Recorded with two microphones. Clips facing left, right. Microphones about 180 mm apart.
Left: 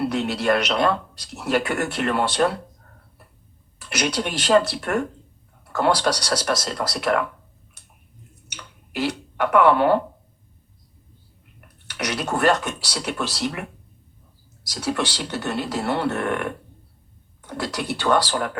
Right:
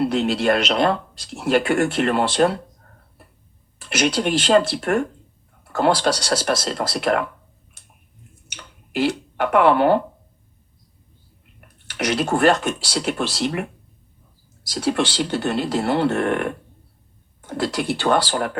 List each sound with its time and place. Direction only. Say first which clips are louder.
0.1 s speech: right 2 dB; 25° right (ahead or behind)
3.8 s speech: right 4 dB; 25° right (ahead or behind)
5.7 s speech: right 2 dB; 25° right (ahead or behind)
9.0 s speech: even; 30° right (ahead or behind)
11.9 s speech: right 5 dB; 25° right (ahead or behind)
14.7 s speech: right 4 dB; 25° right (ahead or behind)